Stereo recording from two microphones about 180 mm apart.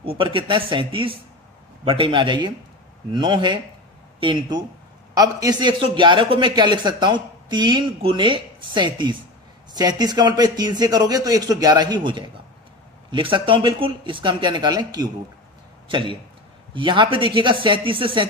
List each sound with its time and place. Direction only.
0.0 s a man's voice: 30° right (ahead or behind)
15.9 s a man's voice: 30° right (ahead or behind)